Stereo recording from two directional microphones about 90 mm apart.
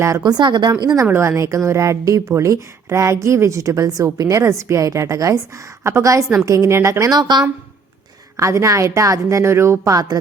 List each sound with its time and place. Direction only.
0.2 s a woman's voice: 55° right (ahead or behind)
1.0 s a woman's voice: 25° right (ahead or behind)
7.1 s a woman's voice: 50° right (ahead or behind)
8.4 s a woman's voice: 35° right (ahead or behind)